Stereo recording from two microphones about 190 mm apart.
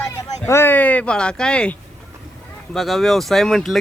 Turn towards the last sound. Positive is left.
turn(degrees=0)  # may be behind; listen again after turning